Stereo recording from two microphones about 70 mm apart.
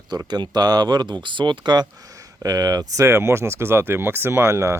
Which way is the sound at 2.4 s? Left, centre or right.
Right.